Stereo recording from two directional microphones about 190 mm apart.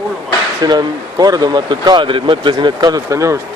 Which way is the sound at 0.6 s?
20° right (ahead or behind).